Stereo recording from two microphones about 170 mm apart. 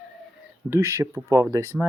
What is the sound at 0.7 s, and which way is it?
Speech, 15° right (ahead or behind).